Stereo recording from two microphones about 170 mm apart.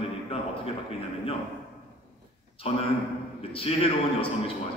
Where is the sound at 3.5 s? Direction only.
35° left (ahead or behind).